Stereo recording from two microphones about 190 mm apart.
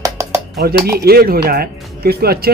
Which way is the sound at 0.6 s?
55° right (ahead or behind).